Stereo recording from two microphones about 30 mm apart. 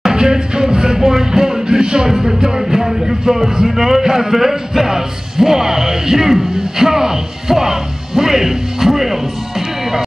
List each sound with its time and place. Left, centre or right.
0.1 s music: right
0.9 s music: centre
2.0 s music: centre
3.6 s speech: centre